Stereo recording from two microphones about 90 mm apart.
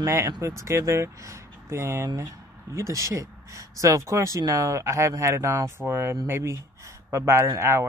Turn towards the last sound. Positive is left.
turn(degrees=-30)  # may be behind; listen again after turning